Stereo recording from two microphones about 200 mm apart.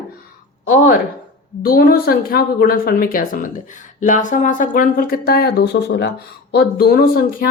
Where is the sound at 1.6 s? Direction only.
50° left (ahead or behind).